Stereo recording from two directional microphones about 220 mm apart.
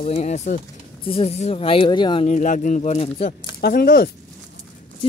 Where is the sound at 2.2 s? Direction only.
35° left (ahead or behind).